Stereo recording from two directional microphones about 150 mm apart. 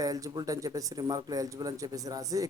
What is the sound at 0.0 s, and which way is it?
Speech, 25° right (ahead or behind).